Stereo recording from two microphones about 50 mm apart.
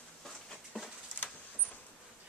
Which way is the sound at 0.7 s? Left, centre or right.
Centre.